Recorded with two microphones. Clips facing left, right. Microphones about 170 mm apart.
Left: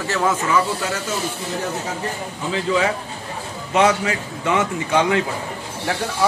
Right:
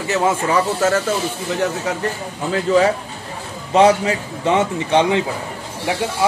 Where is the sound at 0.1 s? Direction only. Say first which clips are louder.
Right 3 dB; 25° right (ahead or behind).